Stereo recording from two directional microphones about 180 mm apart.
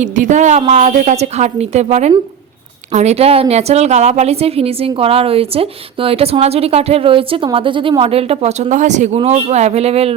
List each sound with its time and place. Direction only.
0.0 s a woman's voice: 40° right (ahead or behind)